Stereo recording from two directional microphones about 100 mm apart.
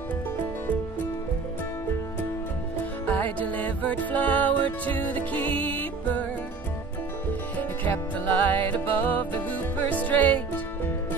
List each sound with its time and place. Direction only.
3.1 s music: 15° left (ahead or behind)
7.5 s music: 15° left (ahead or behind)